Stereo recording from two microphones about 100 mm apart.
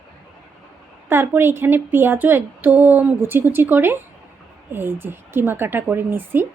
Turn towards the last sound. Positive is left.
turn(degrees=-20)  # may be behind; listen again after turning